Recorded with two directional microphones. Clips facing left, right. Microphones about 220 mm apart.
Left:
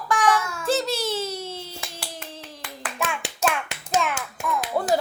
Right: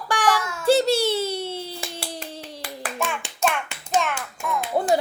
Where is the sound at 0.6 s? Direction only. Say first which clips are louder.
Right 7 dB; 30° right (ahead or behind).